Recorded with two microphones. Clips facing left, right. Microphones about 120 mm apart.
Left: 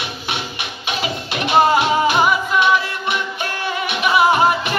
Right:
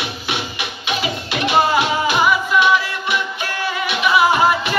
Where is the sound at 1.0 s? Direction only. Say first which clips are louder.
Right 1 dB; 40° left (ahead or behind).